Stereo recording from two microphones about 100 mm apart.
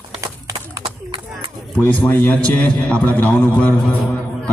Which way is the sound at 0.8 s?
60° right (ahead or behind).